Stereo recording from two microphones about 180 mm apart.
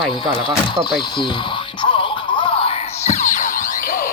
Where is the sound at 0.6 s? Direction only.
25° left (ahead or behind).